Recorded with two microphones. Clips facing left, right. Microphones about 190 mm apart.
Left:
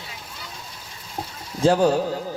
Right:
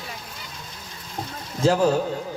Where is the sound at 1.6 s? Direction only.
30° left (ahead or behind).